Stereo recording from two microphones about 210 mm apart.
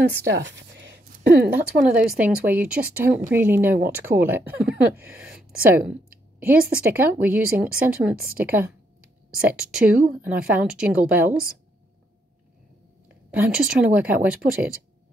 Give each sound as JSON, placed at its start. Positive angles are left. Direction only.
{"t": 0.3, "sound": "speech", "side_deg": -60}
{"t": 1.9, "sound": "speech", "side_deg": -5}
{"t": 13.1, "sound": "speech", "side_deg": -5}